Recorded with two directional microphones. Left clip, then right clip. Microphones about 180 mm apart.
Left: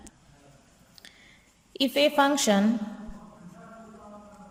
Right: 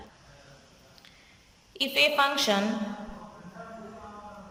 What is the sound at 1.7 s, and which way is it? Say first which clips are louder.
Speech: left 1 dB; 35° left (ahead or behind).